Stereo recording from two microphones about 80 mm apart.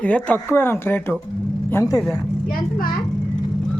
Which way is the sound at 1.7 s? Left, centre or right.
Left.